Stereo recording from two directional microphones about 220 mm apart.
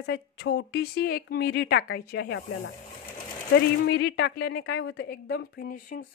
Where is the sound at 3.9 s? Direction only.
50° left (ahead or behind).